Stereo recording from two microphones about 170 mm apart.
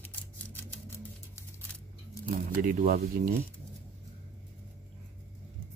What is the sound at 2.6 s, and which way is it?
Speech, 55° right (ahead or behind).